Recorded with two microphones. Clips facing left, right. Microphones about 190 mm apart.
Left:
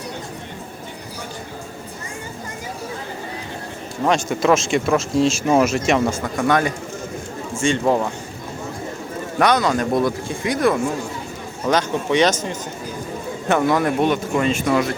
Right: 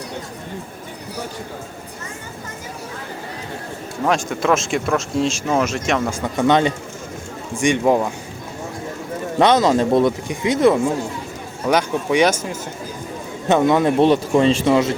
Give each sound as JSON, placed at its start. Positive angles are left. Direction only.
{"t": 4.0, "sound": "speech", "side_deg": 0}
{"t": 6.2, "sound": "speech", "side_deg": -25}
{"t": 9.4, "sound": "speech", "side_deg": -25}
{"t": 11.6, "sound": "speech", "side_deg": -10}
{"t": 13.5, "sound": "speech", "side_deg": -20}